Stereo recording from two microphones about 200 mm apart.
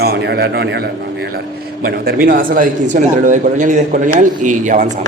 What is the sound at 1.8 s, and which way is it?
Speech, 50° right (ahead or behind).